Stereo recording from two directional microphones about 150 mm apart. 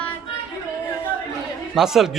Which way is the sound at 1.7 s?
5° right (ahead or behind).